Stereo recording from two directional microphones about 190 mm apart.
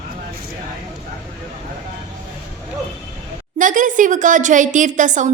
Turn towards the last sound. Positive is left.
turn(degrees=-40)  # may be behind; listen again after turning